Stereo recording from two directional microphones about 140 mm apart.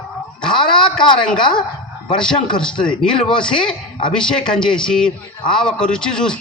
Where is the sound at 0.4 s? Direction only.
5° left (ahead or behind).